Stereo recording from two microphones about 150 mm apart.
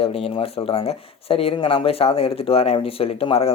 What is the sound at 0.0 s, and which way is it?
Speech, 40° left (ahead or behind).